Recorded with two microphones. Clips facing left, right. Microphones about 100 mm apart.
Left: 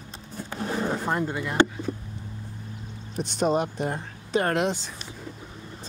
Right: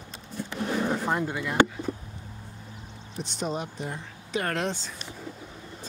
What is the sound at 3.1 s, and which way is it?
Speech, 60° left (ahead or behind).